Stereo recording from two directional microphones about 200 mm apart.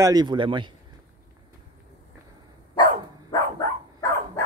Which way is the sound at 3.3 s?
15° left (ahead or behind).